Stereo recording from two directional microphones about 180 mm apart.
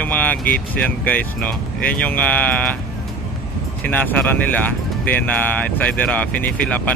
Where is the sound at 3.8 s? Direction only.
10° left (ahead or behind).